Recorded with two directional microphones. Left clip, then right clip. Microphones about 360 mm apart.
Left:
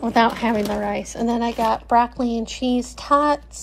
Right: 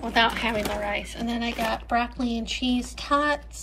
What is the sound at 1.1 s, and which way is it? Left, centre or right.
Speech, centre.